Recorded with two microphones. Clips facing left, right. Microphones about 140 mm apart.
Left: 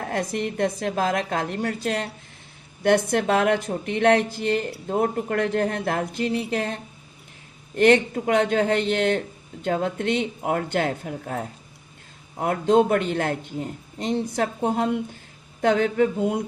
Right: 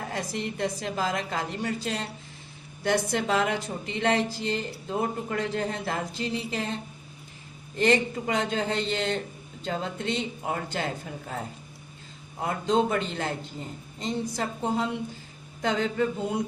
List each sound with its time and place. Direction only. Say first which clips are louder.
0.0 s speech: left 6 dB; 55° left (ahead or behind)
7.8 s speech: left 6 dB; 60° left (ahead or behind)